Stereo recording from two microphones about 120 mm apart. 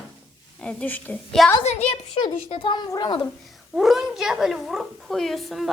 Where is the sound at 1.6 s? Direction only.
70° left (ahead or behind).